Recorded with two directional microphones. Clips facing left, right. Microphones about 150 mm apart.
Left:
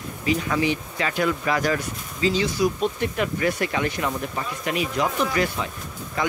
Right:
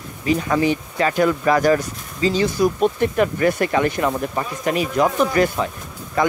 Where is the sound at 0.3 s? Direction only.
40° right (ahead or behind).